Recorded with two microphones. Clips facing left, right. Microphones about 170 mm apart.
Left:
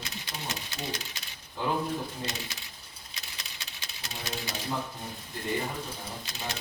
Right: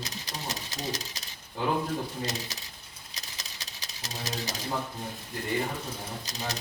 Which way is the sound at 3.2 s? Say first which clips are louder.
Right 1 dB; 40° right (ahead or behind).